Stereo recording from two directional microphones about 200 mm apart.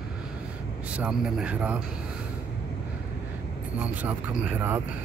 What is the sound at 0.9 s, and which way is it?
Speech, 5° right (ahead or behind).